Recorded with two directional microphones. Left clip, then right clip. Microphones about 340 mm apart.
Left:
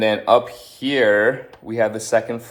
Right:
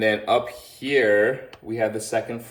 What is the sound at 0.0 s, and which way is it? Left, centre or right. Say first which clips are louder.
A man's voice: left 5 dB; centre.